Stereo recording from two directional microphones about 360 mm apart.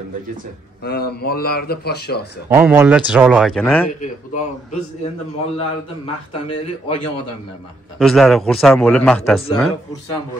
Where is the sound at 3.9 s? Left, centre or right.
Left.